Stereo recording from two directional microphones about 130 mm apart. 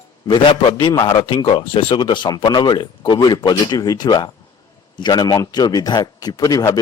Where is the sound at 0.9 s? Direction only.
40° left (ahead or behind).